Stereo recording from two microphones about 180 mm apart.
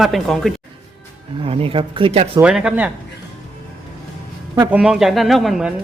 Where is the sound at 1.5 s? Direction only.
30° right (ahead or behind).